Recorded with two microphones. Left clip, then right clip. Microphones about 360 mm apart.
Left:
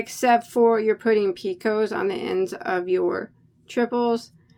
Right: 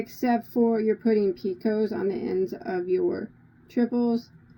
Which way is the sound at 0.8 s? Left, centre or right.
Left.